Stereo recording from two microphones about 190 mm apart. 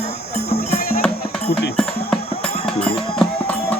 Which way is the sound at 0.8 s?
50° left (ahead or behind).